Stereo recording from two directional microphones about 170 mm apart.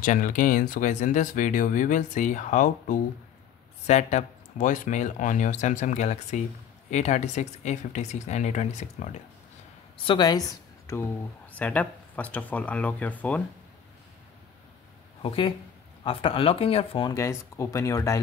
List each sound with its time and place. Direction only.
0.0 s speech: 50° left (ahead or behind)
10.0 s speech: 25° left (ahead or behind); by 13.4 s 10° left (ahead or behind)
15.2 s speech: 30° left (ahead or behind)
17.1 s speech: 15° left (ahead or behind)